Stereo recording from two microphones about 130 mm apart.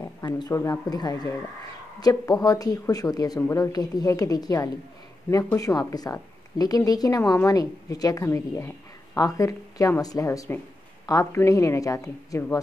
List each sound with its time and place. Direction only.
0.2 s a woman's voice: 25° left (ahead or behind)